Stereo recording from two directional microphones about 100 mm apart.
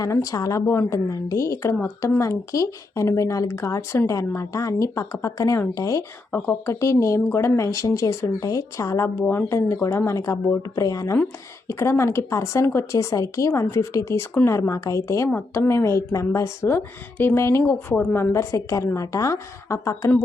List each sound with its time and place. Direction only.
0.0 s speech: 30° left (ahead or behind)
6.3 s speech: 25° left (ahead or behind)
9.2 s speech: 20° left (ahead or behind)
9.5 s speech: 30° left (ahead or behind)